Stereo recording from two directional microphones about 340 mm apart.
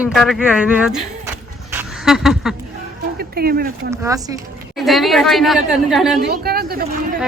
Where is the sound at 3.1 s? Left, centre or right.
Right.